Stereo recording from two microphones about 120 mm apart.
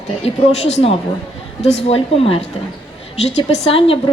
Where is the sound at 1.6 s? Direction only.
60° left (ahead or behind).